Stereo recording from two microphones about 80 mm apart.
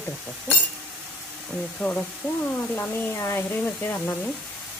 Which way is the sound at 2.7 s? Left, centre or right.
Left.